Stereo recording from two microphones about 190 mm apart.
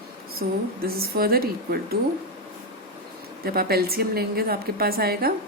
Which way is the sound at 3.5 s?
55° right (ahead or behind).